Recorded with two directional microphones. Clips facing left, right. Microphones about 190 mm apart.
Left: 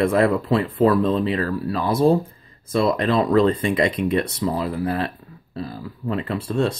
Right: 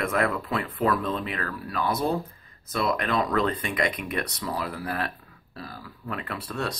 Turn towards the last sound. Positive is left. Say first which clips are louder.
# left 9 dB
turn(degrees=25)  # may be behind; listen again after turning